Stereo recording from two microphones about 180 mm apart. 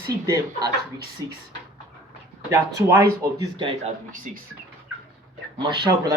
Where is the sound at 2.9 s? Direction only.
15° right (ahead or behind).